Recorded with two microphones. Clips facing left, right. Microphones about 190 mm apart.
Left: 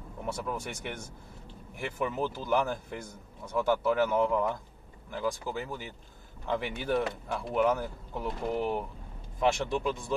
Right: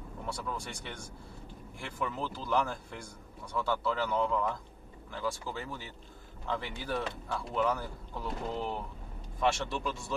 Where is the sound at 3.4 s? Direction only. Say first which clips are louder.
Left 5 dB; 20° left (ahead or behind).